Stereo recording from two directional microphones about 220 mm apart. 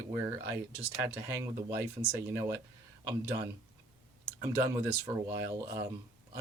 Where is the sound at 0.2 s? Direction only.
10° right (ahead or behind).